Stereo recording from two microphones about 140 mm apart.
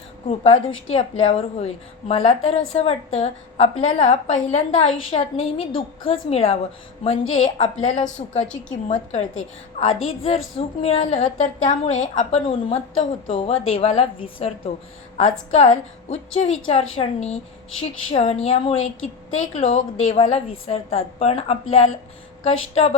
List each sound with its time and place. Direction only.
0.3 s a woman's voice: 45° left (ahead or behind)
9.8 s a woman's voice: 45° left (ahead or behind)
11.0 s a woman's voice: 60° left (ahead or behind)
12.5 s a woman's voice: 45° left (ahead or behind)
15.2 s a woman's voice: 55° left (ahead or behind)
19.3 s a woman's voice: 60° left (ahead or behind)